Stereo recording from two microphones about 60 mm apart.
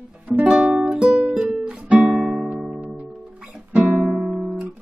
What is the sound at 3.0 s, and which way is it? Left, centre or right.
Guitar, centre.